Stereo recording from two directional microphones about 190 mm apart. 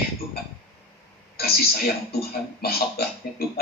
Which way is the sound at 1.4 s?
55° left (ahead or behind).